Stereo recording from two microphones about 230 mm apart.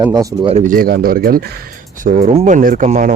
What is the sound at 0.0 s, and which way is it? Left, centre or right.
Speech, centre.